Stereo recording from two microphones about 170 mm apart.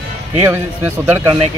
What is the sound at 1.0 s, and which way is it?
Speech, 15° right (ahead or behind).